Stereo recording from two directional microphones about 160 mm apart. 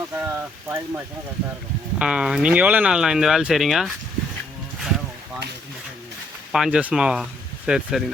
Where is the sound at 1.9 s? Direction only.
5° right (ahead or behind).